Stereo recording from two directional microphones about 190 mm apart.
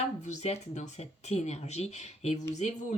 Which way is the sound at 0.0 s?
35° left (ahead or behind).